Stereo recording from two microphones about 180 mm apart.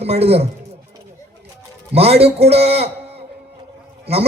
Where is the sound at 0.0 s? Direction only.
35° right (ahead or behind).